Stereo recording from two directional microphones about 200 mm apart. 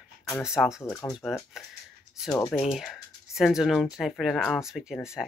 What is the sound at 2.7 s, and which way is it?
Speech, centre (ahead or behind).